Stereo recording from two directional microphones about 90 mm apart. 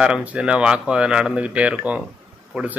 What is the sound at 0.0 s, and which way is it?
Speech, 15° right (ahead or behind).